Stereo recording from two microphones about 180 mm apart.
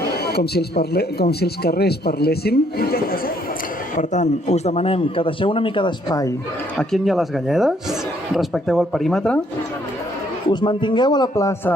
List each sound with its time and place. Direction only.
0.0 s speech: 60° left (ahead or behind)
3.9 s a man's voice: 40° left (ahead or behind); by 6.3 s 20° left (ahead or behind)
6.7 s speech: centre (ahead or behind)
10.5 s a man's voice: 25° left (ahead or behind)